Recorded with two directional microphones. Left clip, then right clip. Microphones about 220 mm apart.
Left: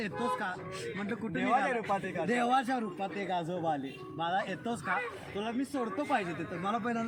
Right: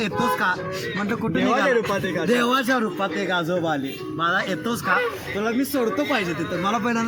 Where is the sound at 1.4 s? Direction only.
25° left (ahead or behind).